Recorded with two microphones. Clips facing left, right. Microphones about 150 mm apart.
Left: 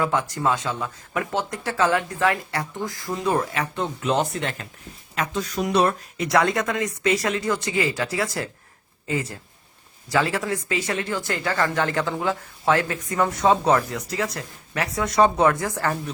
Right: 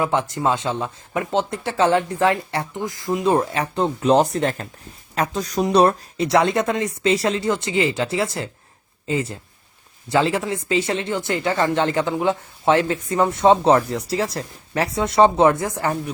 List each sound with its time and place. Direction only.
0.0 s speech: 25° right (ahead or behind)